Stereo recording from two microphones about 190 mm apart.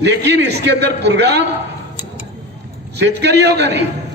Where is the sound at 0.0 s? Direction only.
65° right (ahead or behind).